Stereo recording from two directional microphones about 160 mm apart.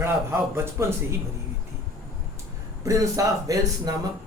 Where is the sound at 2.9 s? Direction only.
20° right (ahead or behind).